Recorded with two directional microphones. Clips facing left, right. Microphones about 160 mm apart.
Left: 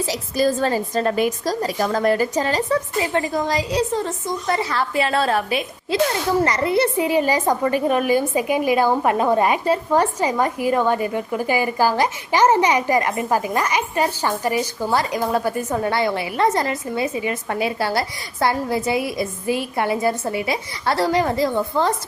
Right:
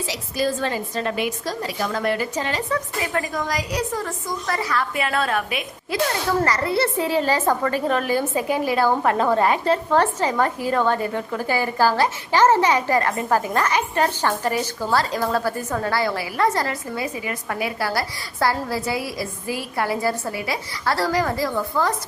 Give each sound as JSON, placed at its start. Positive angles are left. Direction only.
{"t": 0.0, "sound": "a woman's voice", "side_deg": 40}
{"t": 6.4, "sound": "a woman's voice", "side_deg": 20}